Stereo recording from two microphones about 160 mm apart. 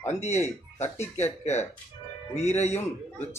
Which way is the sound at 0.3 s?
15° left (ahead or behind).